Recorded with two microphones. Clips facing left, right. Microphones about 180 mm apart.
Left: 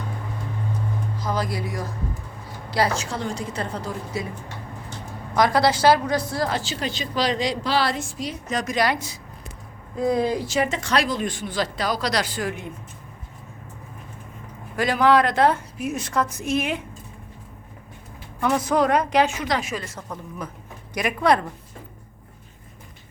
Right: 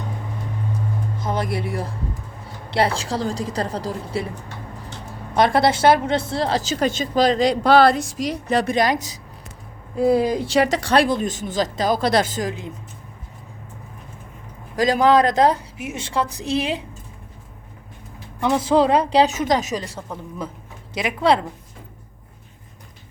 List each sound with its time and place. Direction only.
1.2 s a woman's voice: 25° right (ahead or behind)
5.3 s a woman's voice: 25° right (ahead or behind)
6.6 s speech: 45° right (ahead or behind)
8.1 s a woman's voice: 85° right
8.6 s a woman's voice: 25° right (ahead or behind)
10.2 s speech: 15° right (ahead or behind)
10.7 s a woman's voice: 35° right (ahead or behind)
14.8 s a woman's voice: 40° right (ahead or behind)
15.8 s a woman's voice: 25° right (ahead or behind)
18.3 s a woman's voice: 25° right (ahead or behind); by 19.8 s 45° right (ahead or behind)
19.8 s speech: 10° right (ahead or behind)
20.9 s a woman's voice: 25° right (ahead or behind)